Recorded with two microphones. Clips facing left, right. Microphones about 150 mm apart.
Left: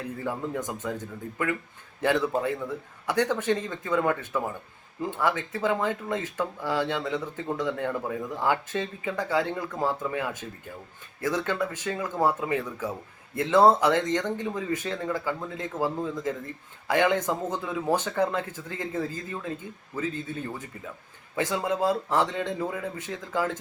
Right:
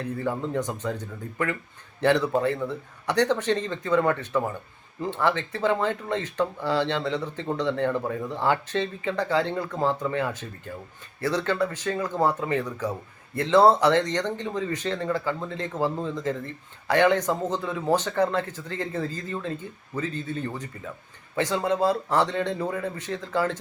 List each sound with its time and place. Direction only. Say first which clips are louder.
0.0 s speech: right 3 dB; 10° left (ahead or behind)
2.0 s speech: right 3 dB; 5° left (ahead or behind)